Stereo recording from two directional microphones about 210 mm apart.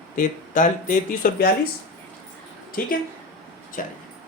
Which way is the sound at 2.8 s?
45° left (ahead or behind).